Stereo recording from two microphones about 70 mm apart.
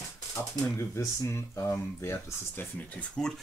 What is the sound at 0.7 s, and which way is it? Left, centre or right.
Speech, left.